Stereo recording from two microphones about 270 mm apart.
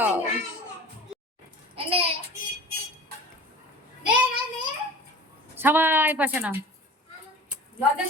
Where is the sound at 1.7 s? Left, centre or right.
Right.